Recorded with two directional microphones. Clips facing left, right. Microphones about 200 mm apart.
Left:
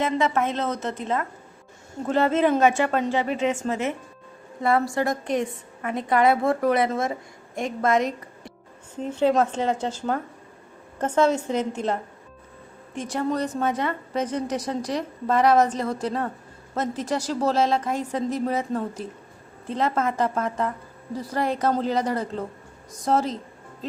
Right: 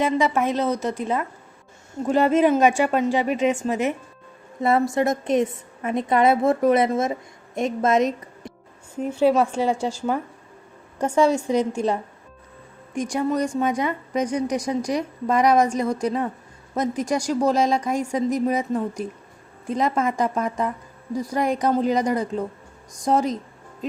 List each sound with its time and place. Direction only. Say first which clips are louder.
0.0 s a woman's voice: right 2 dB; 15° right (ahead or behind)
9.0 s a woman's voice: right 2 dB; 10° right (ahead or behind)
12.9 s a woman's voice: right 3 dB; 15° right (ahead or behind)